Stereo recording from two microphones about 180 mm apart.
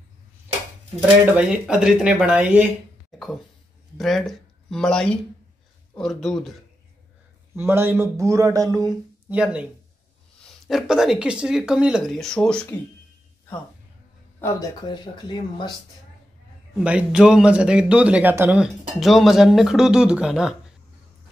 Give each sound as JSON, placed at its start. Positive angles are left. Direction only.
{"t": 1.3, "sound": "speech", "side_deg": -5}
{"t": 4.0, "sound": "speech", "side_deg": 0}
{"t": 7.5, "sound": "speech", "side_deg": -15}
{"t": 9.3, "sound": "speech", "side_deg": -5}
{"t": 14.4, "sound": "speech", "side_deg": 20}
{"t": 16.7, "sound": "speech", "side_deg": -5}